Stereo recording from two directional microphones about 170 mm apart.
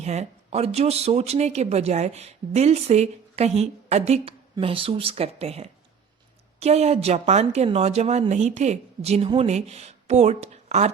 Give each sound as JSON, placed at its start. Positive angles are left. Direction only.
{"t": 0.0, "sound": "speech", "side_deg": -40}